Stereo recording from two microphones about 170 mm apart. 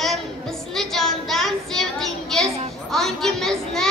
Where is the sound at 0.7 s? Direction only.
Centre (ahead or behind).